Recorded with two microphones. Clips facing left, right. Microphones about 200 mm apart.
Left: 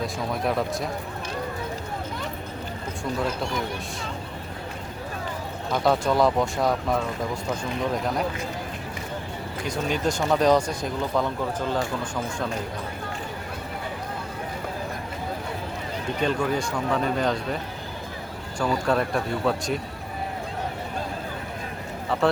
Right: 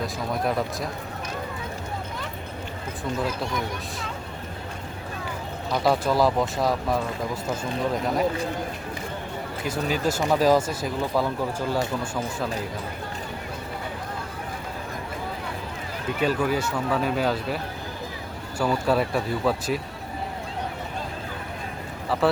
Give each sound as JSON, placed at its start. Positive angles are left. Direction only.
{"t": 0.0, "sound": "speech", "side_deg": 0}
{"t": 5.7, "sound": "speech", "side_deg": 0}
{"t": 8.0, "sound": "speech", "side_deg": 0}
{"t": 9.6, "sound": "speech", "side_deg": -5}
{"t": 16.2, "sound": "speech", "side_deg": -5}
{"t": 18.6, "sound": "speech", "side_deg": -5}
{"t": 22.1, "sound": "speech", "side_deg": 0}